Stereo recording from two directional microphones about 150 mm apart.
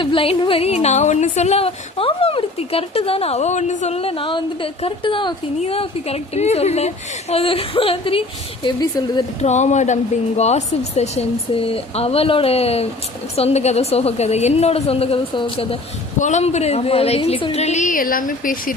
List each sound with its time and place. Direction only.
0.0 s a woman's voice: 35° left (ahead or behind)
9.4 s speech: 50° left (ahead or behind)
16.1 s speech: 55° left (ahead or behind)